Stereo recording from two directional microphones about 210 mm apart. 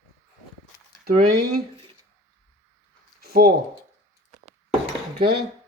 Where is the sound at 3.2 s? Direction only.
45° right (ahead or behind).